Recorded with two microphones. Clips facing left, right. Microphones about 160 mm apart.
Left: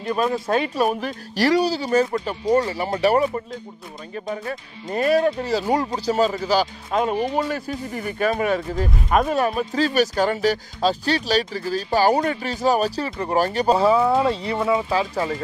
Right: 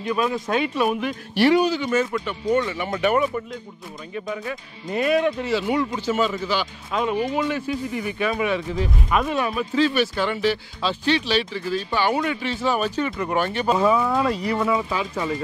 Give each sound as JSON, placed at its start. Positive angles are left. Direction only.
{"t": 0.0, "sound": "speech", "side_deg": 40}